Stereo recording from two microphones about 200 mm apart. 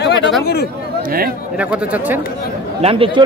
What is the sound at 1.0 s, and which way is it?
Speech, 45° right (ahead or behind).